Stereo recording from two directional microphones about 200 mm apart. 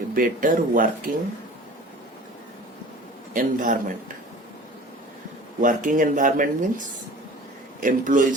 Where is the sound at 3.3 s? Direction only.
40° right (ahead or behind).